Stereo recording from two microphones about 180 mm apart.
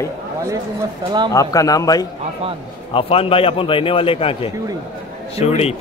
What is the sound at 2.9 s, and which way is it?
Speech, 30° left (ahead or behind).